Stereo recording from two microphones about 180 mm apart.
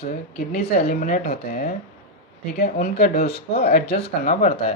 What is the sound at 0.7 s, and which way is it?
Speech, 60° left (ahead or behind).